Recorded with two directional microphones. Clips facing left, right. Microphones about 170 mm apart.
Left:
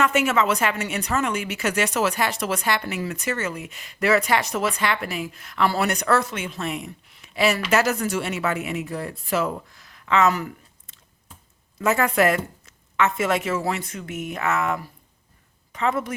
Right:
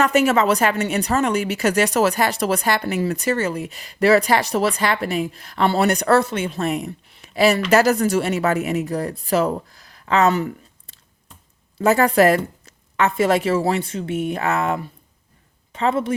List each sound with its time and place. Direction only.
0.0 s a woman's voice: 35° right (ahead or behind)